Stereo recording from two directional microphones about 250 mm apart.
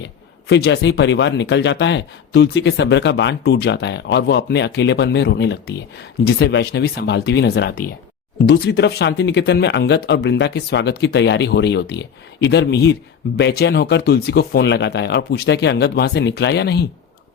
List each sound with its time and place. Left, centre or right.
0.0 s speech: left